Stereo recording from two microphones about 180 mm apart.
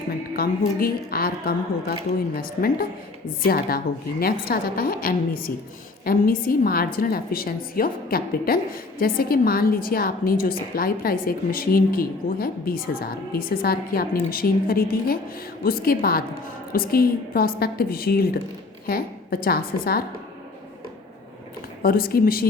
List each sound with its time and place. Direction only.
0.3 s a woman's voice: 55° left (ahead or behind)
21.8 s a woman's voice: 55° left (ahead or behind)